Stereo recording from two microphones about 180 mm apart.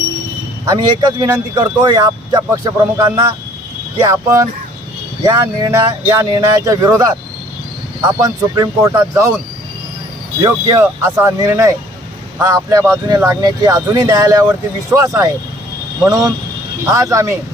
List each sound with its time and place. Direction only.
0.6 s speech: 20° right (ahead or behind)
5.2 s speech: 15° right (ahead or behind)
8.2 s speech: 20° right (ahead or behind)
10.4 s speech: 15° right (ahead or behind)